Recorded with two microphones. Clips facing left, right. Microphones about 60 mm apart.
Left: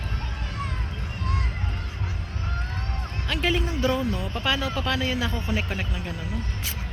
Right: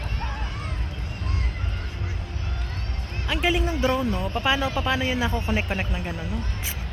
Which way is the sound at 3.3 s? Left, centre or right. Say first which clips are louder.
Right 2 dB; centre.